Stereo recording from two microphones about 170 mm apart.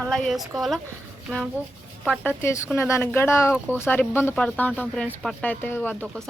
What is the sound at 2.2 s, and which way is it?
Speech, 15° left (ahead or behind).